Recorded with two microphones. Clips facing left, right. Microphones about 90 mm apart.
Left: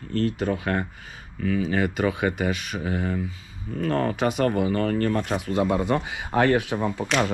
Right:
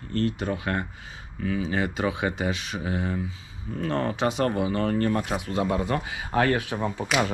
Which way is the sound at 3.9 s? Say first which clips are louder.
Left 2 dB; 20° right (ahead or behind).